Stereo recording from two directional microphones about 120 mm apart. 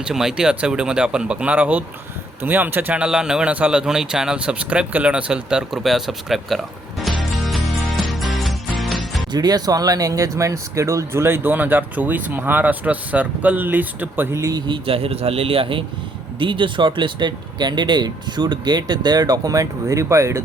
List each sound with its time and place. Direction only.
0.0 s a man's voice: 5° right (ahead or behind)
7.2 s music: centre (ahead or behind)
9.3 s speech: 35° right (ahead or behind)
14.7 s a man's voice: 50° right (ahead or behind); by 20.4 s 25° right (ahead or behind)